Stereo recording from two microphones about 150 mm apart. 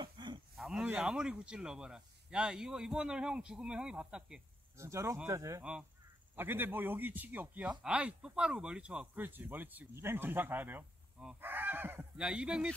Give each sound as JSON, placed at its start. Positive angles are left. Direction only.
{"t": 0.0, "sound": "a sound", "side_deg": -30}
{"t": 0.6, "sound": "a man's voice", "side_deg": 0}
{"t": 4.7, "sound": "speech", "side_deg": -20}
{"t": 5.6, "sound": "a man's voice", "side_deg": -5}